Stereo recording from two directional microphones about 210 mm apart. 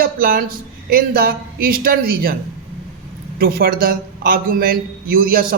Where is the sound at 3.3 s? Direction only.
45° right (ahead or behind).